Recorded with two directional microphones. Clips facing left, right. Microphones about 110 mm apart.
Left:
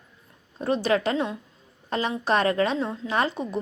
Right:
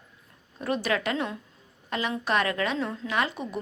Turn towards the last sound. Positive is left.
turn(degrees=30)  # may be behind; listen again after turning